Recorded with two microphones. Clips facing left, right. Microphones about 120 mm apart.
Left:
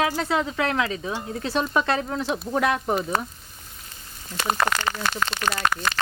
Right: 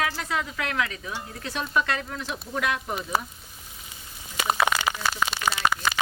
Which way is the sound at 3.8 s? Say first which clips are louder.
Left 4 dB; 5° right (ahead or behind).